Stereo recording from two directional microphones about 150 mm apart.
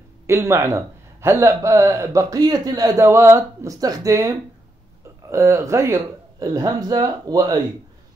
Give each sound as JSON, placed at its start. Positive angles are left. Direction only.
{"t": 0.3, "sound": "speech", "side_deg": -20}